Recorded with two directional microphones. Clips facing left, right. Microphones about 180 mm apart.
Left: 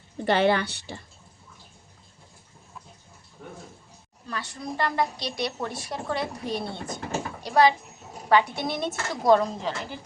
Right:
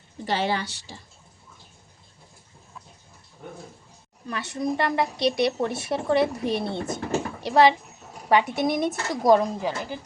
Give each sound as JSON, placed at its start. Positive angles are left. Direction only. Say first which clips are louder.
{"t": 0.3, "sound": "a woman's voice", "louder": "left 4 dB", "side_deg": 60}
{"t": 4.3, "sound": "a woman's voice", "louder": "right 7 dB", "side_deg": -20}